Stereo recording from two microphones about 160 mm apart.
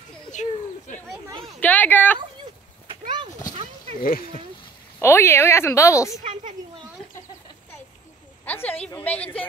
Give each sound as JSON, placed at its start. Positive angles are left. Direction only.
{"t": 0.3, "sound": "bird", "side_deg": 50}
{"t": 1.4, "sound": "speech", "side_deg": 10}
{"t": 2.9, "sound": "a sound", "side_deg": -30}
{"t": 4.0, "sound": "speech", "side_deg": 65}
{"t": 4.9, "sound": "speech", "side_deg": 15}
{"t": 8.5, "sound": "speech", "side_deg": 10}